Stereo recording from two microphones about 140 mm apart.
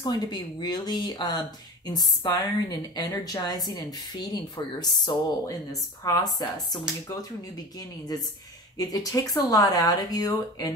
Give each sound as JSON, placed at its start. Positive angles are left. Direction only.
{"t": 0.0, "sound": "speech", "side_deg": 30}